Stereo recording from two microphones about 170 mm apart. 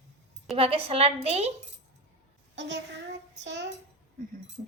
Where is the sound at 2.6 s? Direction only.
90° right.